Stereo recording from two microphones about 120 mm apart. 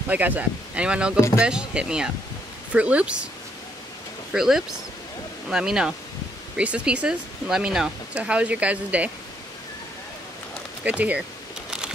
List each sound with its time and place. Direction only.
0.1 s speech: 15° right (ahead or behind)
1.1 s speech: 25° left (ahead or behind)
1.4 s speech: 10° right (ahead or behind)
4.3 s speech: 5° right (ahead or behind)
10.8 s speech: 10° right (ahead or behind)